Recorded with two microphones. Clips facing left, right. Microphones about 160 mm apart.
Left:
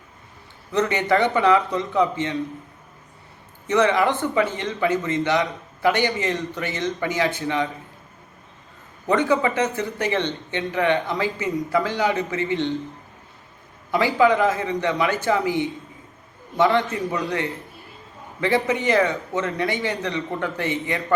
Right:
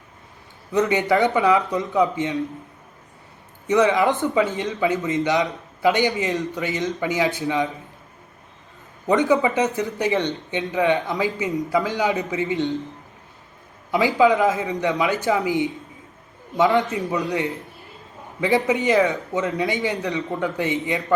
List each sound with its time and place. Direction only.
0.7 s speech: 15° right (ahead or behind)
3.7 s speech: 15° right (ahead or behind)
9.0 s speech: 15° right (ahead or behind)
13.9 s a man's voice: 15° right (ahead or behind)